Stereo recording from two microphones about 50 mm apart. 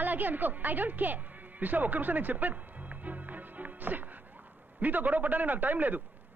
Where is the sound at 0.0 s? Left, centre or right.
Right.